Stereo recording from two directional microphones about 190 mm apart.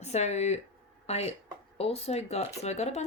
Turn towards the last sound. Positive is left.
turn(degrees=35)  # may be behind; listen again after turning